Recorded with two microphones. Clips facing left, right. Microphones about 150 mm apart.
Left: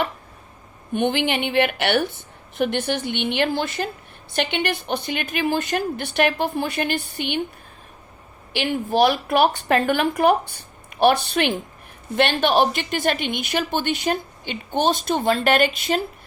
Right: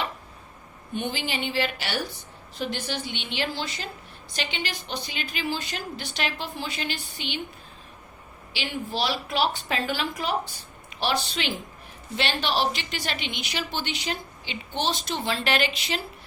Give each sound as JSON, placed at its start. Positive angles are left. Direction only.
{"t": 0.9, "sound": "a woman's voice", "side_deg": 65}
{"t": 8.5, "sound": "a woman's voice", "side_deg": 55}